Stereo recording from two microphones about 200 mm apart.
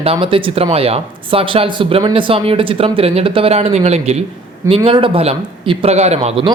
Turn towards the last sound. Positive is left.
turn(degrees=-30)  # may be behind; listen again after turning